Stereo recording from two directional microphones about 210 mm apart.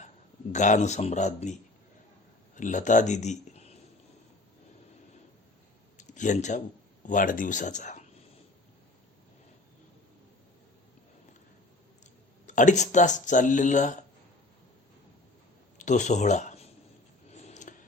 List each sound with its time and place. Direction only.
0.5 s speech: 35° left (ahead or behind)
2.6 s speech: 35° left (ahead or behind)
6.0 s a sound: 35° left (ahead or behind)
7.0 s speech: 40° left (ahead or behind)
12.5 s speech: 35° left (ahead or behind)
15.8 s speech: 35° left (ahead or behind)
17.3 s a sound: 35° left (ahead or behind)